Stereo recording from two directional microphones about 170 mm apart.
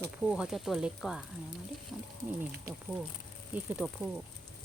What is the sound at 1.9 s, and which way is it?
Wild animals, 5° right (ahead or behind).